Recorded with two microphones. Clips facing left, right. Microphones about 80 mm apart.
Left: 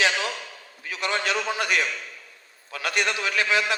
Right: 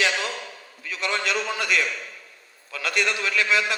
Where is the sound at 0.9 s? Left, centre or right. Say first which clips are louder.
Even; left.